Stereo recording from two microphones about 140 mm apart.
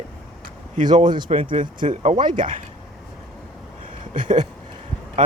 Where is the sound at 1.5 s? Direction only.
65° right (ahead or behind).